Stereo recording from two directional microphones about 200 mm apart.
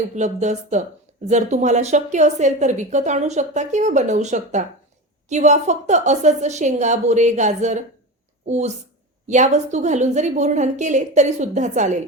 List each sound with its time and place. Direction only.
0.2 s speech: 35° right (ahead or behind)